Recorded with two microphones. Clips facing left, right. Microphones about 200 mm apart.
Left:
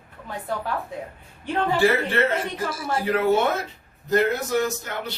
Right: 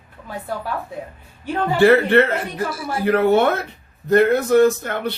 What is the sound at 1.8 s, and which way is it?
Speech, 65° right (ahead or behind).